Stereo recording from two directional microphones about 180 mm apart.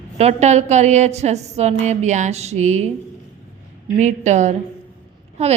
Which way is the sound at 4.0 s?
40° right (ahead or behind).